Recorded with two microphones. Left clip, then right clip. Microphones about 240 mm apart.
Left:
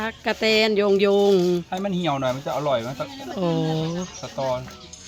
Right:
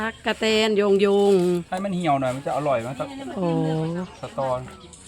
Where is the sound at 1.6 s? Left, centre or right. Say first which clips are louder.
Right 1 dB; right.